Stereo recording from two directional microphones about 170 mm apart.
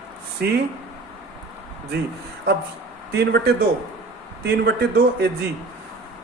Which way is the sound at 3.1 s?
75° right (ahead or behind).